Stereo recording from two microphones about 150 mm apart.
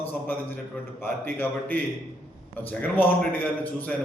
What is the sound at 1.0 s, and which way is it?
A man's voice, 15° left (ahead or behind).